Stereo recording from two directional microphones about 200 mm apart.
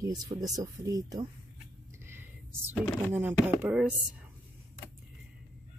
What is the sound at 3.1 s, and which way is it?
Speech, 10° right (ahead or behind).